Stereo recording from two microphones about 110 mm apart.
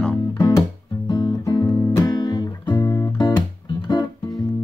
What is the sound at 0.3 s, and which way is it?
Music, 35° left (ahead or behind).